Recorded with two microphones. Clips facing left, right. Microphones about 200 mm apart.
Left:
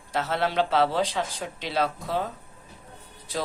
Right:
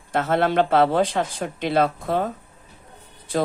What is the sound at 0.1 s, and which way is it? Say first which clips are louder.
Speech: right 6 dB; 55° right (ahead or behind).